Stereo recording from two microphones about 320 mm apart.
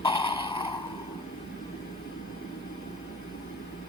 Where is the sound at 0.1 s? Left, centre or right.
Centre.